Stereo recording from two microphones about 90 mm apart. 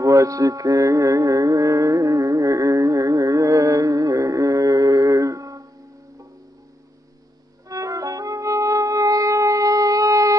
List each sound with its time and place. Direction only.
0.0 s music: 35° right (ahead or behind)
7.6 s music: 40° right (ahead or behind)